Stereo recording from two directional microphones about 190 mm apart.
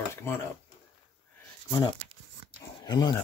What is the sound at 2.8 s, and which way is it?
Speech, 20° left (ahead or behind).